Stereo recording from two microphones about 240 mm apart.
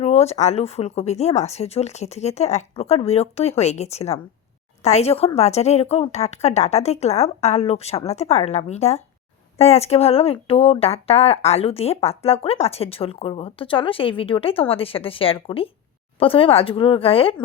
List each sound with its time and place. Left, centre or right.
0.0 s speech: left